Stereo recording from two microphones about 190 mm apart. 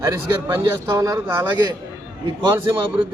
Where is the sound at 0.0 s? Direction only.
15° right (ahead or behind).